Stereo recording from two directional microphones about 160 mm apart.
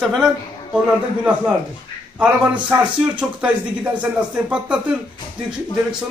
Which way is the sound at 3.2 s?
10° right (ahead or behind).